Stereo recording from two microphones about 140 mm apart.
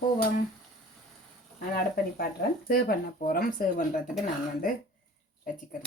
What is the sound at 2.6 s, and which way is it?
Speech, 90° left.